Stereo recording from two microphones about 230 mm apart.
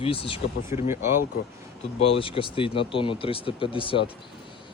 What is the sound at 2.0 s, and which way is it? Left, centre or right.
Speech, left.